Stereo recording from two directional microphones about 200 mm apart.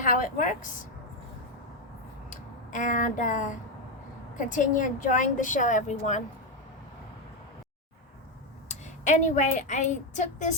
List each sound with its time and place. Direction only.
0.0 s a woman's voice: 40° left (ahead or behind)
2.3 s a woman's voice: 40° left (ahead or behind)
8.7 s a woman's voice: 35° left (ahead or behind)